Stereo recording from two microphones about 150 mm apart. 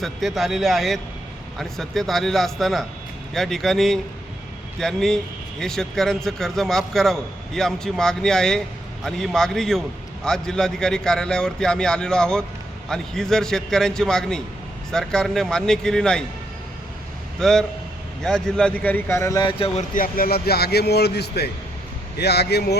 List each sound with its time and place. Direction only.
0.0 s speech: centre (ahead or behind)
17.4 s speech: 5° left (ahead or behind)
19.4 s speech: 35° left (ahead or behind)
19.9 s a man's voice: 70° left (ahead or behind); by 22.7 s 90° left